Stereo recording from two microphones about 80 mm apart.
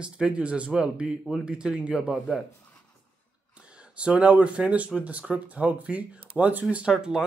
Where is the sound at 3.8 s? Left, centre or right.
Centre.